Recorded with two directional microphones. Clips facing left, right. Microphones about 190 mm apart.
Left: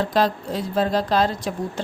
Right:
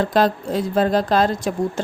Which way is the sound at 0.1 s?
50° right (ahead or behind).